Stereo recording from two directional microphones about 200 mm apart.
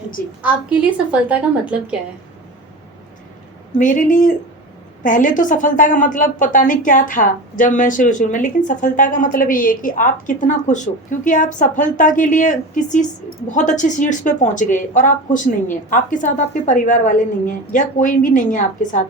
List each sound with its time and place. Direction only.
0.4 s a woman's voice: 5° right (ahead or behind)
3.8 s a woman's voice: 40° left (ahead or behind)